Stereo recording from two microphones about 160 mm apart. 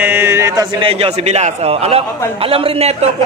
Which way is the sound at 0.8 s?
40° right (ahead or behind).